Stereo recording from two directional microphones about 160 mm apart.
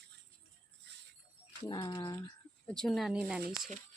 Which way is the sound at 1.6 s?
30° left (ahead or behind).